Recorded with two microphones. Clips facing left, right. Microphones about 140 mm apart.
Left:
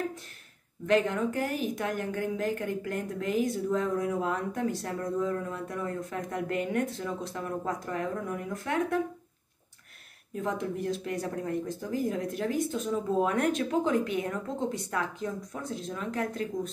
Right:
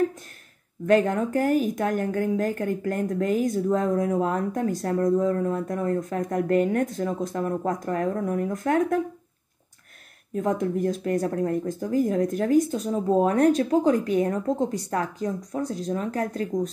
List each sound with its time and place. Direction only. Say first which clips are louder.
0.8 s a woman's voice: right 5 dB; 45° right (ahead or behind)
10.3 s speech: right 7 dB; 45° right (ahead or behind)